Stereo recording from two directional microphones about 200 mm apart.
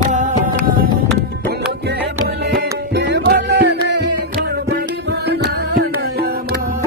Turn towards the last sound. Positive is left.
turn(degrees=-55)  # may be behind; listen again after turning